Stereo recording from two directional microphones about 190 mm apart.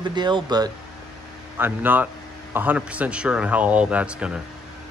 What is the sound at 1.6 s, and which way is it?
Speech, 10° right (ahead or behind).